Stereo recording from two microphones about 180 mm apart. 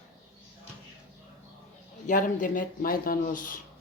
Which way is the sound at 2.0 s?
45° left (ahead or behind).